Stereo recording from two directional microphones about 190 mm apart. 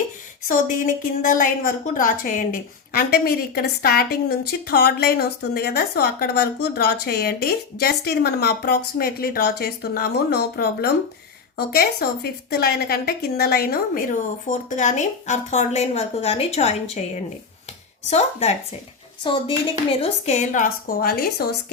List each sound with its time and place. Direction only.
0.4 s a woman's voice: 45° left (ahead or behind)
18.1 s a woman's voice: 35° left (ahead or behind); by 21.5 s 55° left (ahead or behind)